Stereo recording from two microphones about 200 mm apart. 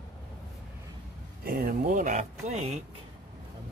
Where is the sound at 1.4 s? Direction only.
45° right (ahead or behind).